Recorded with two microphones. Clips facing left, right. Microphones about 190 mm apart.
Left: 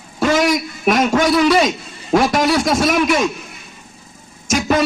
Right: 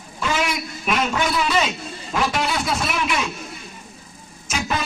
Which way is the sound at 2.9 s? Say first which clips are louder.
Left 8 dB; 40° left (ahead or behind).